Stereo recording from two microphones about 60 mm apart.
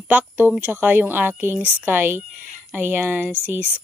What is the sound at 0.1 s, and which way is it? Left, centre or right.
Speech, right.